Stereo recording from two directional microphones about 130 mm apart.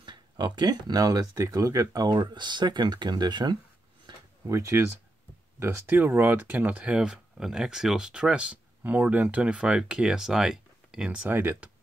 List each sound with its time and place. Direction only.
0.0 s speech: 35° right (ahead or behind)
4.1 s a sound: 35° right (ahead or behind)
4.5 s speech: 20° right (ahead or behind)